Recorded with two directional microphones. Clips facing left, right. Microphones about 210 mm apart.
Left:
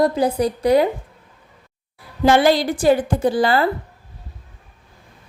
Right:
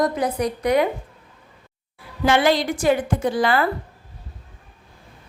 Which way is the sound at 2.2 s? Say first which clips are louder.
Left 3 dB; 35° left (ahead or behind).